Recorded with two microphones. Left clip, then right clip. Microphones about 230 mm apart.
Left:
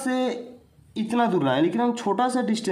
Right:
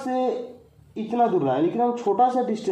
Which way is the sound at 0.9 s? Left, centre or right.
Left.